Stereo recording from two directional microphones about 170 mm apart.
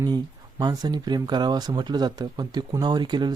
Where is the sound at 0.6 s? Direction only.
25° right (ahead or behind).